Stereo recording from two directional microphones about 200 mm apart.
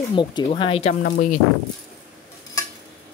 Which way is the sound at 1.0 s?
45° left (ahead or behind).